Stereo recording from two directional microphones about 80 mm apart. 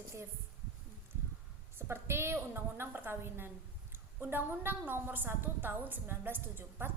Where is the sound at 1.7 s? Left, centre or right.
Right.